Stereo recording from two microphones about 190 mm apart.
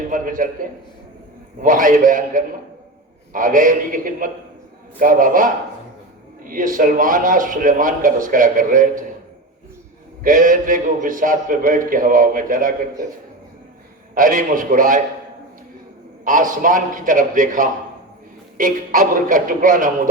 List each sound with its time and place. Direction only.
0.1 s speech: 45° right (ahead or behind)
10.2 s speech: 45° right (ahead or behind)
14.2 s speech: 45° right (ahead or behind)
16.2 s speech: 45° right (ahead or behind)